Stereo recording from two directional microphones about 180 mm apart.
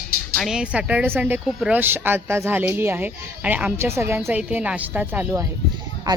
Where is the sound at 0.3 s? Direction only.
5° right (ahead or behind).